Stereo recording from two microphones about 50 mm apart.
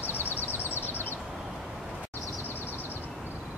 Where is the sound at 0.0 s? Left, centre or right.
Left.